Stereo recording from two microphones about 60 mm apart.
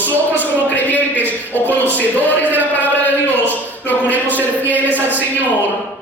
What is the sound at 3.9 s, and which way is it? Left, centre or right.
Speech, left.